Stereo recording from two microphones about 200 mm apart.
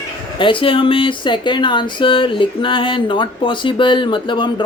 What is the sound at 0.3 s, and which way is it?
Speech, 25° left (ahead or behind).